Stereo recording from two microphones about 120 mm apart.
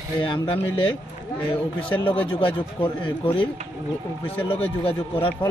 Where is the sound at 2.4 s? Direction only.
45° left (ahead or behind).